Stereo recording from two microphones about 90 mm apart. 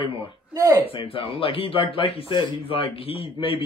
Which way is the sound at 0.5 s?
35° right (ahead or behind).